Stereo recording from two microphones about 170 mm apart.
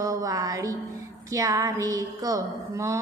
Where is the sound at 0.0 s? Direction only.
20° right (ahead or behind).